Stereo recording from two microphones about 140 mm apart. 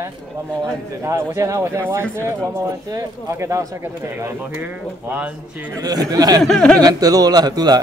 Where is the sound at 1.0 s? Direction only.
20° right (ahead or behind).